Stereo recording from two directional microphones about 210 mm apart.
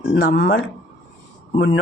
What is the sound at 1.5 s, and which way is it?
Speech, 25° left (ahead or behind).